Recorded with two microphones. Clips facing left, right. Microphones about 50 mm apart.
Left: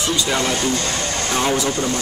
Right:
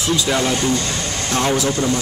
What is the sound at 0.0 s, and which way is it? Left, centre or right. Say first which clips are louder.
Speech: right 2 dB; centre.